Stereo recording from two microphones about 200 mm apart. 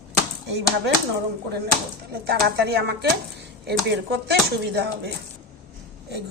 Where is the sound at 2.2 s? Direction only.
55° right (ahead or behind).